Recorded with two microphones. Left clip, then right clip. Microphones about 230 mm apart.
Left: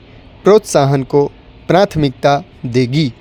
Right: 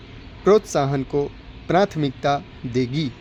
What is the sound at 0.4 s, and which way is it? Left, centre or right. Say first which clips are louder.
A man's voice: left 7 dB; left.